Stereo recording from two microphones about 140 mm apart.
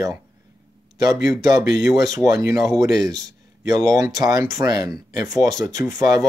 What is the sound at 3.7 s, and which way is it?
Speech, 25° right (ahead or behind).